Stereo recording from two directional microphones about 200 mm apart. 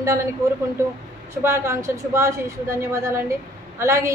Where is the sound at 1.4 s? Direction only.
15° right (ahead or behind).